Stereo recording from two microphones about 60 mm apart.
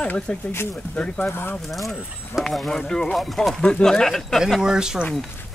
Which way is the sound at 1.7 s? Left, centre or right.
Centre.